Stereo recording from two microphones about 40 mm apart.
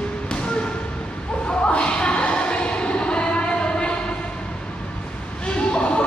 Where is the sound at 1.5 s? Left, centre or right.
Left.